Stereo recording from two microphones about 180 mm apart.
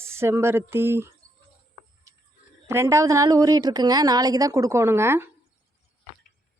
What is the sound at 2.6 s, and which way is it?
A woman's voice, 15° right (ahead or behind).